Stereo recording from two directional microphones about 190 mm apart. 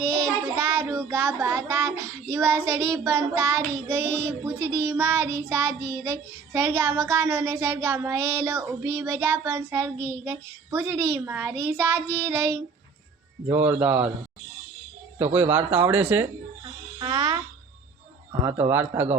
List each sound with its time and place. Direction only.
0.5 s child singing: 15° right (ahead or behind)
15.2 s child singing: 10° right (ahead or behind)
17.0 s a child's voice: 25° right (ahead or behind)
18.4 s child singing: 10° right (ahead or behind)